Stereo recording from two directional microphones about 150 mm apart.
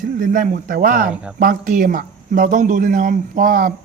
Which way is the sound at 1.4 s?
65° right (ahead or behind).